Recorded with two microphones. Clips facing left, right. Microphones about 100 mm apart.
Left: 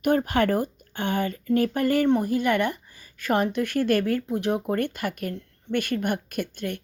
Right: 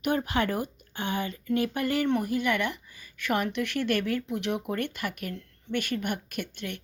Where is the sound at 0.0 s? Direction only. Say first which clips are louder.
Left 5 dB; 45° left (ahead or behind).